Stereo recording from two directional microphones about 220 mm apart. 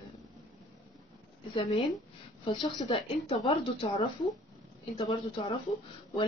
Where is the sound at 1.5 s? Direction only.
25° left (ahead or behind).